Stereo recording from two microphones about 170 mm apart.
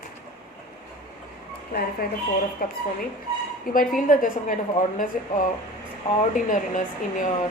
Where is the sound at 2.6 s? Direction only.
60° left (ahead or behind).